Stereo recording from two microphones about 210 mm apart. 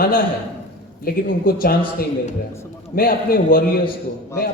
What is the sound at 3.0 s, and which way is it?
Speech, 45° left (ahead or behind).